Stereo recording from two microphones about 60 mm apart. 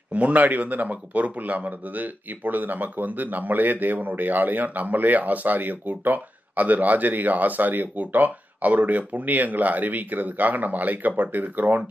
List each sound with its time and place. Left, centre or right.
0.1 s speech: right